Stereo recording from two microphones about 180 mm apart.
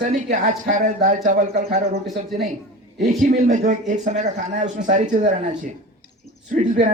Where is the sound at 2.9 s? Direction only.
50° right (ahead or behind).